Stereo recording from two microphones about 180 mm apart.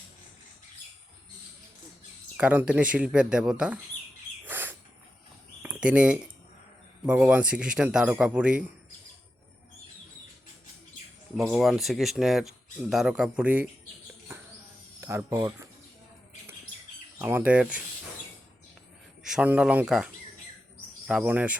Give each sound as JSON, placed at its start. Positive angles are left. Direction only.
{"t": 2.3, "sound": "speech", "side_deg": -10}
{"t": 4.4, "sound": "bird", "side_deg": -10}
{"t": 5.6, "sound": "speech", "side_deg": -5}
{"t": 11.3, "sound": "speech", "side_deg": 0}
{"t": 15.0, "sound": "speech", "side_deg": -15}
{"t": 17.2, "sound": "speech", "side_deg": -10}
{"t": 19.2, "sound": "speech", "side_deg": -5}
{"t": 21.1, "sound": "speech", "side_deg": -5}